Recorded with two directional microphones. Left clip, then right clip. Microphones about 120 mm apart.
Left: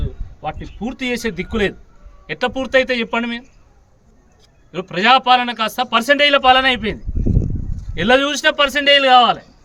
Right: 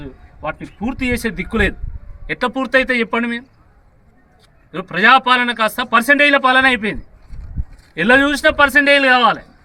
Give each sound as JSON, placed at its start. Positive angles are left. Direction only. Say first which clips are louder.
{"t": 0.0, "sound": "speech", "louder": "right 1 dB", "side_deg": 15}
{"t": 4.9, "sound": "a man's voice", "louder": "right 1 dB", "side_deg": 20}